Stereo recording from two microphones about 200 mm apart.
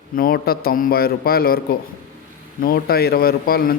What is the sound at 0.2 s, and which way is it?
A man's voice, 50° left (ahead or behind).